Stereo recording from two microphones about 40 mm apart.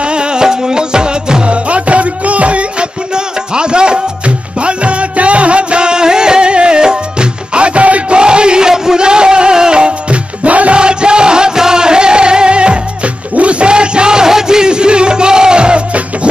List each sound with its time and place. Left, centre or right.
0.0 s music: right
3.2 s music: right
8.2 s music: right
10.8 s music: right